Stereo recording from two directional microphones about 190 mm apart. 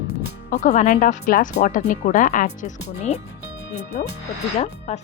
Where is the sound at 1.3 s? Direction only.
55° left (ahead or behind).